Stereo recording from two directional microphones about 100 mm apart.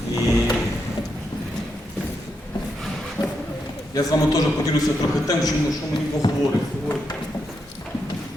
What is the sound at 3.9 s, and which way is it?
A woman's voice, 40° left (ahead or behind).